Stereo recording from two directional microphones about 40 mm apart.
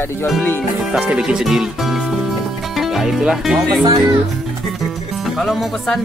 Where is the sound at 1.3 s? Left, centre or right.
Centre.